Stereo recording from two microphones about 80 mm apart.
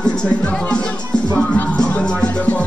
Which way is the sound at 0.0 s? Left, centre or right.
Centre.